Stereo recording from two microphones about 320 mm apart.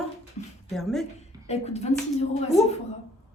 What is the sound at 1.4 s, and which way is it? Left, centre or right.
Speech, centre.